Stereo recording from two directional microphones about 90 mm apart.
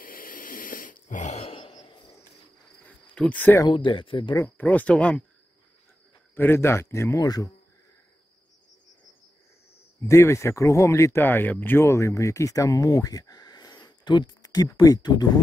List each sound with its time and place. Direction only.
1.4 s a sound: 90° left
3.2 s speech: 15° left (ahead or behind)
3.6 s speech: 65° left (ahead or behind)
4.6 s speech: 15° left (ahead or behind)
6.3 s speech: 25° left (ahead or behind)
7.2 s speech: 45° left (ahead or behind)
10.0 s speech: 30° left (ahead or behind); by 15.4 s 50° left (ahead or behind)